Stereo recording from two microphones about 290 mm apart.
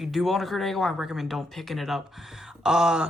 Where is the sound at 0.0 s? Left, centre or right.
Centre.